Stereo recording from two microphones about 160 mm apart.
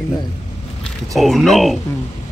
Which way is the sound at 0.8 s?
Centre (ahead or behind).